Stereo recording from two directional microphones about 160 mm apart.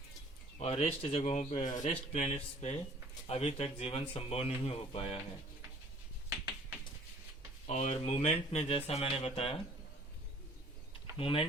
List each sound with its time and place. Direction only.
0.6 s a man's voice: 40° left (ahead or behind)
7.7 s speech: 45° left (ahead or behind)
11.2 s speech: 35° left (ahead or behind)